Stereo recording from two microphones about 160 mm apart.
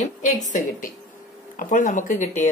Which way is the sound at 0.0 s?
50° left (ahead or behind).